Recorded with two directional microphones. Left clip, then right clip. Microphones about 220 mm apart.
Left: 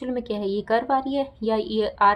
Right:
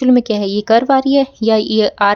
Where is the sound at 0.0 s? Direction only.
50° right (ahead or behind).